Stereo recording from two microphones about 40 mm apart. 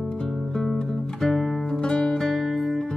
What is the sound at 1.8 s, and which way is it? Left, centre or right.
Music, centre.